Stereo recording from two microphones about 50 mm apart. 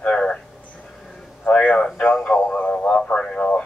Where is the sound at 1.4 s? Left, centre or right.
Left.